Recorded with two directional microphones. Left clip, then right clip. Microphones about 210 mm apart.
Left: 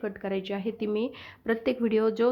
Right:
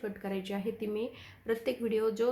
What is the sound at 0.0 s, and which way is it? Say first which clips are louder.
Speech: left 6 dB; 40° left (ahead or behind).